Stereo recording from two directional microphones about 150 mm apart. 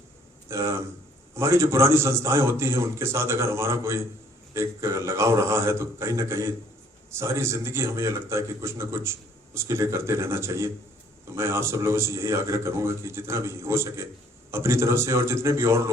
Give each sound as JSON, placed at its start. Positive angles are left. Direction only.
{"t": 0.4, "sound": "a man's voice", "side_deg": -20}